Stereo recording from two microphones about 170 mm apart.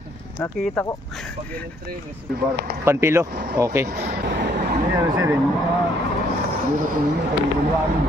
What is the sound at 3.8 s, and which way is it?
Speech, 70° right (ahead or behind).